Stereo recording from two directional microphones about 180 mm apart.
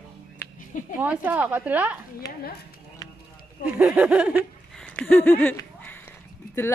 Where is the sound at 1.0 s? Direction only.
10° right (ahead or behind).